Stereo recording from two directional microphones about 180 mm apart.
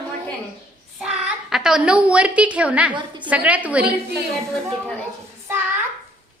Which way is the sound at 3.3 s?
10° right (ahead or behind).